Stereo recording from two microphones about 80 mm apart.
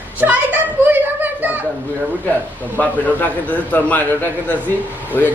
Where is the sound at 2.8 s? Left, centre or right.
Centre.